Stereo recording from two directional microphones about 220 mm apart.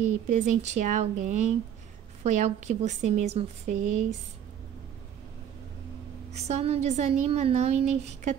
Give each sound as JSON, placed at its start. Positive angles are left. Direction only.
{"t": 0.0, "sound": "a woman's voice", "side_deg": -35}
{"t": 6.3, "sound": "a woman's voice", "side_deg": -30}